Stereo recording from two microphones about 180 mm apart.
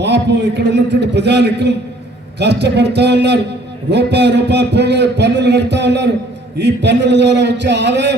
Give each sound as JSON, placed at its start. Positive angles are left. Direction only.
{"t": 0.0, "sound": "a man's voice", "side_deg": -70}